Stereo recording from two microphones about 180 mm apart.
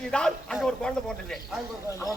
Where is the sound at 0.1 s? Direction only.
5° left (ahead or behind).